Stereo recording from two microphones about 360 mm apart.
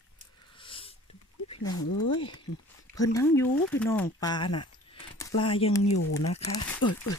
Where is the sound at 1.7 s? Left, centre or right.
Left.